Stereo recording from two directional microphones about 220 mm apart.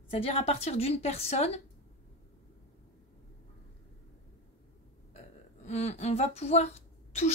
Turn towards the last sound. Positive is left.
turn(degrees=30)  # may be behind; listen again after turning